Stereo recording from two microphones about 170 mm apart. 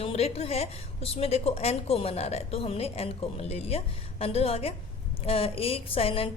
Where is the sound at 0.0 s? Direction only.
35° left (ahead or behind).